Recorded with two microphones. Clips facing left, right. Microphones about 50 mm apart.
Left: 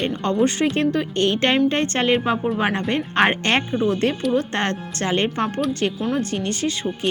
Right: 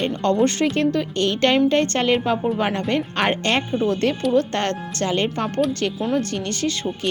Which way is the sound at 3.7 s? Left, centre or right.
Centre.